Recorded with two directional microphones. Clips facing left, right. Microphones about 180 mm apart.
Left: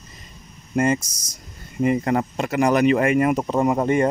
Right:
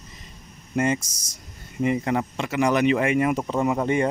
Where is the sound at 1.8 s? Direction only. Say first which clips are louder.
Left 3 dB; 45° left (ahead or behind).